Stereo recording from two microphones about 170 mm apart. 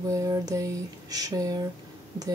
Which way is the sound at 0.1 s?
20° right (ahead or behind).